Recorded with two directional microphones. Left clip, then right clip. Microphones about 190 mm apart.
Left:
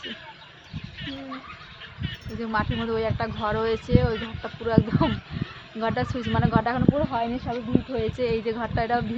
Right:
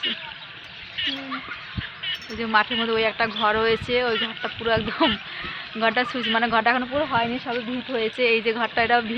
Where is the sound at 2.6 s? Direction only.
30° right (ahead or behind).